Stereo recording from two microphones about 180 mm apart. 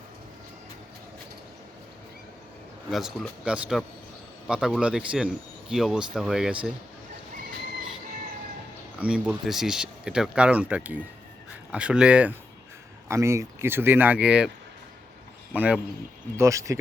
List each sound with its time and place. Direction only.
2.9 s speech: centre (ahead or behind)
9.0 s speech: 5° right (ahead or behind)
15.5 s speech: 10° right (ahead or behind)